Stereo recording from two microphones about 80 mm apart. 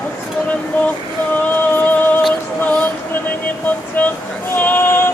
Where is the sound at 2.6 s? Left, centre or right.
Left.